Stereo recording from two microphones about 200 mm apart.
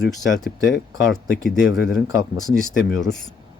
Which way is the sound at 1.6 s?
55° left (ahead or behind).